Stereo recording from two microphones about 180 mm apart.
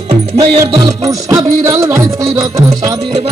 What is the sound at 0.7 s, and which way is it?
Music, 20° right (ahead or behind).